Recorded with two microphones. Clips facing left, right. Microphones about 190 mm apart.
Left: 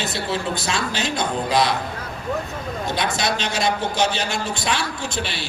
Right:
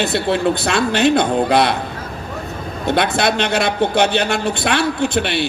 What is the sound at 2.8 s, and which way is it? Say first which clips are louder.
A man's voice: right 8 dB; 60° right (ahead or behind).